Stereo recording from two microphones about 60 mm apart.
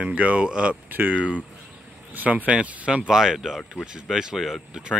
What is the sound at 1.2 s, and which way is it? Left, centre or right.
Speech, left.